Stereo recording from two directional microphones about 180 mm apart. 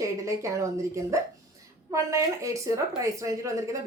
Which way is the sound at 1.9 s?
15° right (ahead or behind).